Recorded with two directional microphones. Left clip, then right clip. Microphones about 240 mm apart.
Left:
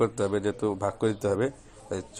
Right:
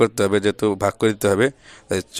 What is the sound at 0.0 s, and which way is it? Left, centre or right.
Speech, right.